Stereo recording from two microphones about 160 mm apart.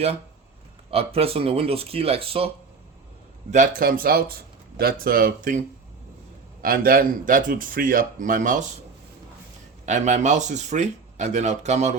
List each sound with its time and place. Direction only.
0.9 s speech: 40° right (ahead or behind)
3.8 s speech: 65° right (ahead or behind)
9.8 s speech: 45° right (ahead or behind)